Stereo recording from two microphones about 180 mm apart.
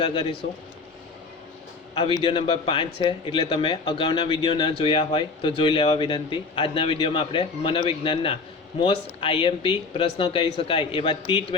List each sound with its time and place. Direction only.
0.0 s speech: 30° left (ahead or behind)
2.2 s speech: 30° left (ahead or behind)